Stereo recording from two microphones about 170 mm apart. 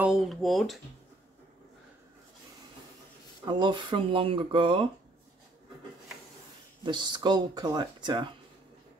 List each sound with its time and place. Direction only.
0.0 s speech: centre (ahead or behind)
3.4 s speech: 25° right (ahead or behind)
6.8 s speech: 25° right (ahead or behind)